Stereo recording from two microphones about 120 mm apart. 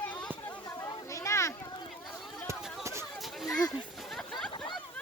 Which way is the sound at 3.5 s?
35° left (ahead or behind).